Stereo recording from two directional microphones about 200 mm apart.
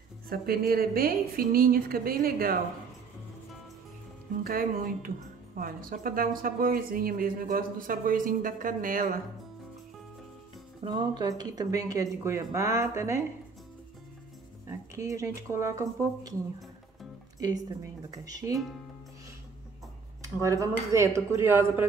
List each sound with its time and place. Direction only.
0.3 s speech: 50° right (ahead or behind)
4.4 s speech: 45° right (ahead or behind)
10.8 s speech: 20° right (ahead or behind)
14.7 s a woman's voice: 15° right (ahead or behind)
20.3 s speech: 15° right (ahead or behind)